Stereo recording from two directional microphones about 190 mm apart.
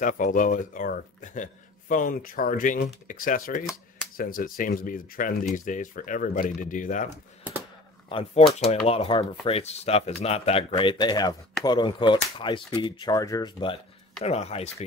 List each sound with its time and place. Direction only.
0.0 s speech: 45° left (ahead or behind)
8.1 s speech: 30° left (ahead or behind)